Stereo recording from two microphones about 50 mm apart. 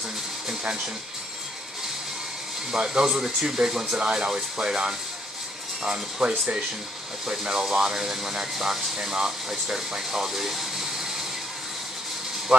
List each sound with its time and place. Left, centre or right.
2.7 s speech: centre